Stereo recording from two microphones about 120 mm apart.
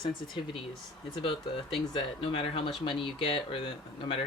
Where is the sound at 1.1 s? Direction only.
45° left (ahead or behind).